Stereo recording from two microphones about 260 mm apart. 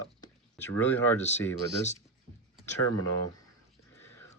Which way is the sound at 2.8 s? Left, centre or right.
Left.